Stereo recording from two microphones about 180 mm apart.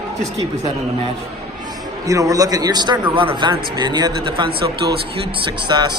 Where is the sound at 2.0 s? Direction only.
20° right (ahead or behind).